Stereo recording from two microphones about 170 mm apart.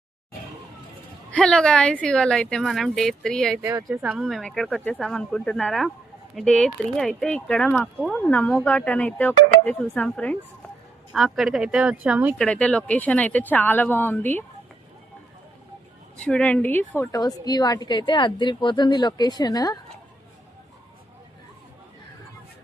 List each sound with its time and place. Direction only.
1.3 s speech: 5° left (ahead or behind)
3.6 s speech: 15° right (ahead or behind)
4.0 s speech: centre (ahead or behind)
12.4 s speech: 5° left (ahead or behind)
16.1 s a woman's voice: 5° left (ahead or behind); by 19.8 s 20° left (ahead or behind)